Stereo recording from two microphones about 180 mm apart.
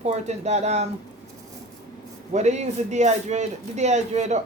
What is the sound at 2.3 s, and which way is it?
Speech, 40° right (ahead or behind).